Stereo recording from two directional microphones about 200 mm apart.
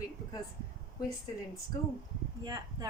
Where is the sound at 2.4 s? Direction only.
20° right (ahead or behind).